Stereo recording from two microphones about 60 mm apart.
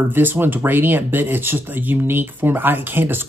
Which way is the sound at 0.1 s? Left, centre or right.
Right.